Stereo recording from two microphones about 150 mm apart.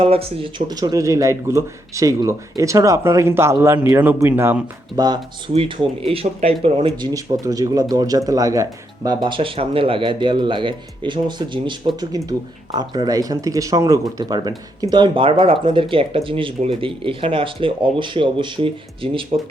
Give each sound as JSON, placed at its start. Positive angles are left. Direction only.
{"t": 0.0, "sound": "speech", "side_deg": -40}
{"t": 4.9, "sound": "speech", "side_deg": -25}
{"t": 7.0, "sound": "speech", "side_deg": -25}